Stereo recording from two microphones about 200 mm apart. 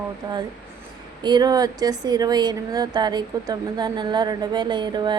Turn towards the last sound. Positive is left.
turn(degrees=-20)  # may be behind; listen again after turning